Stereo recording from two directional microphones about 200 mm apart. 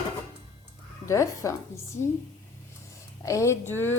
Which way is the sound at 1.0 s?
15° left (ahead or behind).